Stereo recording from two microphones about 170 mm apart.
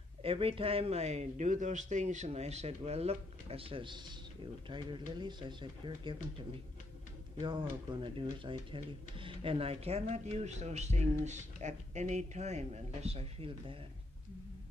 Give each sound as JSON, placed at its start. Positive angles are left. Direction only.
{"t": 0.2, "sound": "speech", "side_deg": -35}